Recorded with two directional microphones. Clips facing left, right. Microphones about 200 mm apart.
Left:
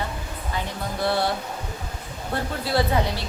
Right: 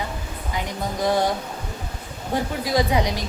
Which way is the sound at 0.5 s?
15° right (ahead or behind).